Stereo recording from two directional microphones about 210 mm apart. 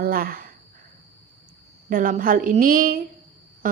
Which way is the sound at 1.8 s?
40° right (ahead or behind).